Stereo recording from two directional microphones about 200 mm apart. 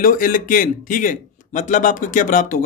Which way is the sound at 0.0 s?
45° left (ahead or behind).